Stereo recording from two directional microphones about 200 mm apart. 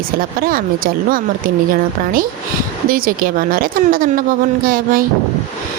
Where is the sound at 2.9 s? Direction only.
45° right (ahead or behind).